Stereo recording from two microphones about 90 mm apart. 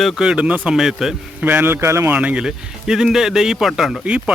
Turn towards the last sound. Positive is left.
turn(degrees=-15)  # may be behind; listen again after turning